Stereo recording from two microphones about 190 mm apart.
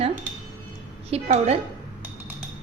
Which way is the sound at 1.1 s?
30° right (ahead or behind).